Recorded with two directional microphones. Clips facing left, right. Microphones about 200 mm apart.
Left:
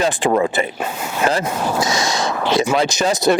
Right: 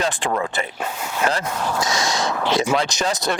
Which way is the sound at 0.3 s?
20° left (ahead or behind).